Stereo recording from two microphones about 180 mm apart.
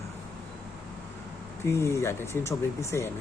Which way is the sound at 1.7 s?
15° left (ahead or behind).